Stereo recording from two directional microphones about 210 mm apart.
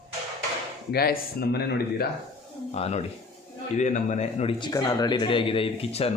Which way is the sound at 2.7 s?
30° left (ahead or behind).